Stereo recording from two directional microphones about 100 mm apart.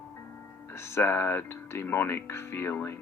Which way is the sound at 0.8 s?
25° left (ahead or behind).